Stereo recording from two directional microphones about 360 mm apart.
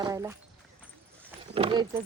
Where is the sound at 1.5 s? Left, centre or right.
Centre.